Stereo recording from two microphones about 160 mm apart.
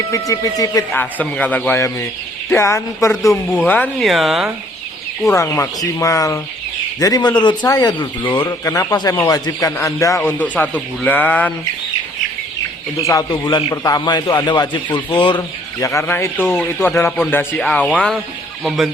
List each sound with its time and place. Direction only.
0.1 s speech: 20° left (ahead or behind)
1.2 s speech: 10° left (ahead or behind)
3.7 s speech: 5° left (ahead or behind)
5.3 s speech: 15° left (ahead or behind)
13.0 s speech: 20° left (ahead or behind)